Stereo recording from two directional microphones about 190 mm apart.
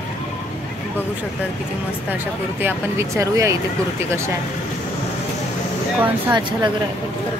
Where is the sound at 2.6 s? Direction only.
10° right (ahead or behind).